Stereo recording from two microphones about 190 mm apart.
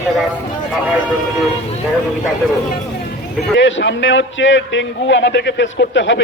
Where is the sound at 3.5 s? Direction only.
70° left (ahead or behind).